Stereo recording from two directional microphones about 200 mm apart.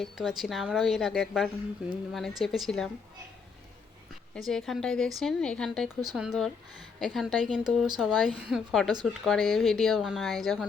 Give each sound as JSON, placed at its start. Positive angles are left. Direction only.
{"t": 0.0, "sound": "speech", "side_deg": 0}
{"t": 4.4, "sound": "speech", "side_deg": 0}
{"t": 5.9, "sound": "speech", "side_deg": -20}
{"t": 6.1, "sound": "speech", "side_deg": -5}